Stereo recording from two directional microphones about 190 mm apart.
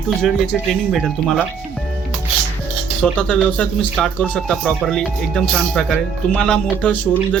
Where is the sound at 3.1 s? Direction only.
5° left (ahead or behind).